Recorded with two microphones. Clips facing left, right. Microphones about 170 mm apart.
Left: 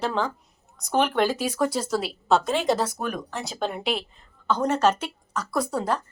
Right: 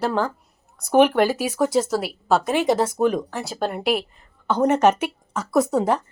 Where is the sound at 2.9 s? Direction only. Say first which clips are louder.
Right 10 dB; 20° right (ahead or behind).